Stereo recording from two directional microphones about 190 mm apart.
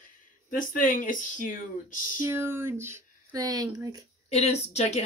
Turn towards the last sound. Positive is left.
turn(degrees=35)  # may be behind; listen again after turning